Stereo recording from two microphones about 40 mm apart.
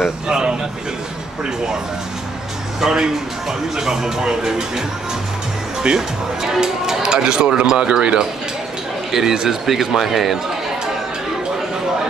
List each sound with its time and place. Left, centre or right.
0.0 s speech: centre
2.8 s speech: centre
5.9 s speech: centre; by 8.2 s right
9.1 s speech: centre